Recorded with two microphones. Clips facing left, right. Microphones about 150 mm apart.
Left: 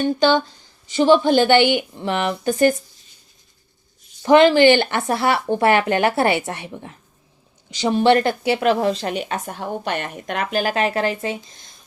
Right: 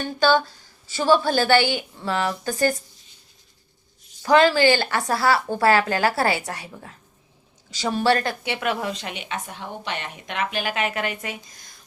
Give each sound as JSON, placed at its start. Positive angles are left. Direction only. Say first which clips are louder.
{"t": 0.0, "sound": "speech", "louder": "left 3 dB", "side_deg": 20}
{"t": 4.2, "sound": "a woman's voice", "louder": "left 5 dB", "side_deg": 25}